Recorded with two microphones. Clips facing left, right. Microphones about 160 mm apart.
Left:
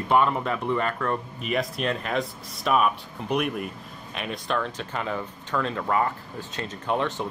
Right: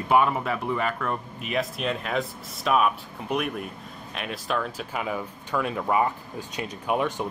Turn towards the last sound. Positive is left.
turn(degrees=-10)  # may be behind; listen again after turning